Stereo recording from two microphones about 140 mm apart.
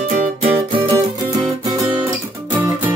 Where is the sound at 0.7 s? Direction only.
35° right (ahead or behind).